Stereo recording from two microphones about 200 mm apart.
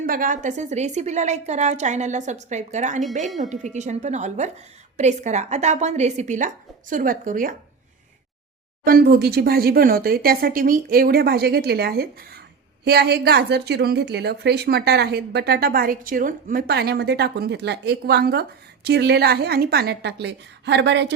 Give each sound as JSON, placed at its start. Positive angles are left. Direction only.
{"t": 0.0, "sound": "a woman's voice", "side_deg": -45}
{"t": 8.8, "sound": "a woman's voice", "side_deg": -50}